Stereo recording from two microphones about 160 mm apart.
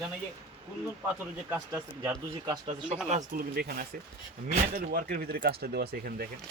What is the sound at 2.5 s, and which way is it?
Speech, 40° right (ahead or behind).